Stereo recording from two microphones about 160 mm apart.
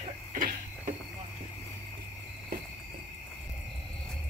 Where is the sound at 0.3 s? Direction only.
60° right (ahead or behind).